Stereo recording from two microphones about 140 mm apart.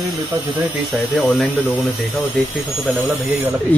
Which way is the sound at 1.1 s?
Centre (ahead or behind).